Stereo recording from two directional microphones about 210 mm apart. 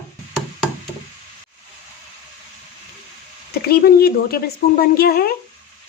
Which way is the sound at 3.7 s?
45° left (ahead or behind).